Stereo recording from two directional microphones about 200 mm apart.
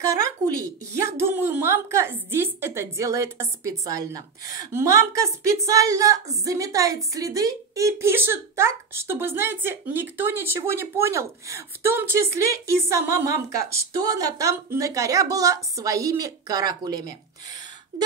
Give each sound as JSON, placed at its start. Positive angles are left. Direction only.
{"t": 0.9, "sound": "a woman's voice", "side_deg": -15}